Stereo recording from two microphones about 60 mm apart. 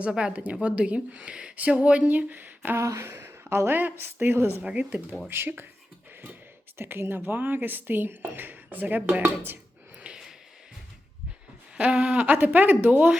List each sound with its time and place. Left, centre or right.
0.2 s speech: centre
2.7 s speech: right
3.7 s speech: right
4.6 s speech: right
5.3 s speech: right
6.7 s speech: right
10.0 s a sound: centre
11.8 s speech: centre